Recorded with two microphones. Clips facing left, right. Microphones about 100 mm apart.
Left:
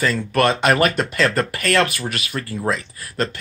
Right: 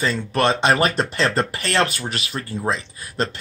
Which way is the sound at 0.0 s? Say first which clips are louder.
Left 2 dB; 25° right (ahead or behind).